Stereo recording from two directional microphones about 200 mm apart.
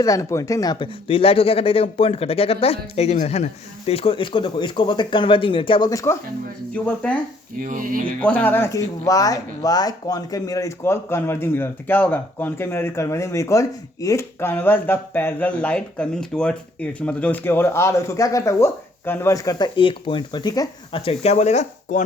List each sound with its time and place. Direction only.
0.0 s speech: 15° left (ahead or behind)
7.6 s a sound: 40° right (ahead or behind)
8.2 s speech: 10° left (ahead or behind); by 22.0 s 35° left (ahead or behind)